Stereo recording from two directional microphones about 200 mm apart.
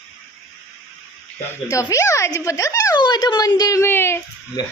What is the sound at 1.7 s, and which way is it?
A woman's voice, 15° left (ahead or behind).